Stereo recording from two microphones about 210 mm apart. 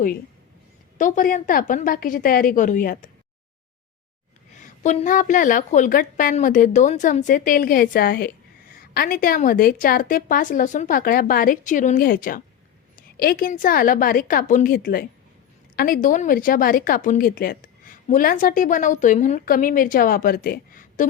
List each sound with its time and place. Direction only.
0.9 s speech: 40° left (ahead or behind)
4.5 s speech: 35° left (ahead or behind)